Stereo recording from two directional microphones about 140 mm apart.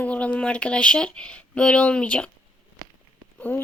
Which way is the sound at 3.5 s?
15° left (ahead or behind).